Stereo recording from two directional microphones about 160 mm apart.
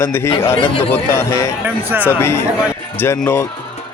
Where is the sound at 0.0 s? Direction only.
15° left (ahead or behind).